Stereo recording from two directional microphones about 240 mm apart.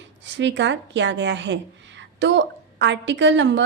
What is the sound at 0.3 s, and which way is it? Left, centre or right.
A woman's voice, right.